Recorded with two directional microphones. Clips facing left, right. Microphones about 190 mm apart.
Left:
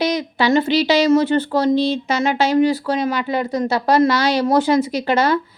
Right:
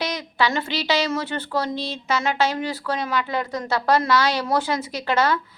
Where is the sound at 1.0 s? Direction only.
40° left (ahead or behind).